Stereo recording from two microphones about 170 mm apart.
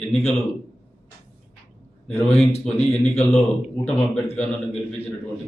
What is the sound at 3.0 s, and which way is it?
Speech, 40° left (ahead or behind).